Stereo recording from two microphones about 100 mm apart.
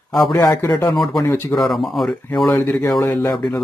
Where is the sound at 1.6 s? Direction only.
Centre (ahead or behind).